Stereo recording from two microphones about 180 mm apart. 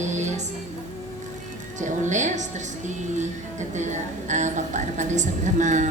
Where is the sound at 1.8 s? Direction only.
40° right (ahead or behind).